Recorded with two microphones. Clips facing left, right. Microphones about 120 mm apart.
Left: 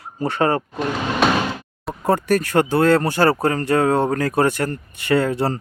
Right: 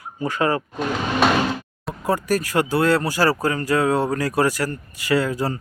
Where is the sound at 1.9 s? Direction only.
30° left (ahead or behind).